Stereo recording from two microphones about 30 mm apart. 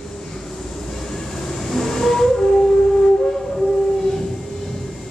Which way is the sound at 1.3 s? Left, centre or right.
Centre.